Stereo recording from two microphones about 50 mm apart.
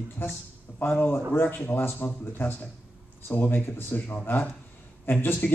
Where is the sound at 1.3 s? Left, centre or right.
Left.